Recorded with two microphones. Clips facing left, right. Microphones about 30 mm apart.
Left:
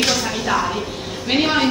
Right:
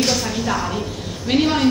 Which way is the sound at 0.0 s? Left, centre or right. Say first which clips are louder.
Left 1 dB; centre.